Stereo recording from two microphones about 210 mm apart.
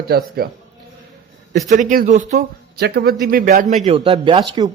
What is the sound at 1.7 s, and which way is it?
A man's voice, 35° right (ahead or behind).